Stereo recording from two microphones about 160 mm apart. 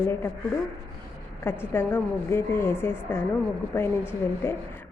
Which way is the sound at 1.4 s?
15° left (ahead or behind).